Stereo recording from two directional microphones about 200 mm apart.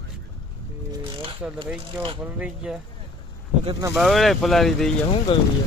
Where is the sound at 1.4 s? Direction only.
10° right (ahead or behind).